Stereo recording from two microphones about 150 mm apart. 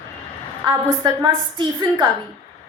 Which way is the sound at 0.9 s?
30° right (ahead or behind).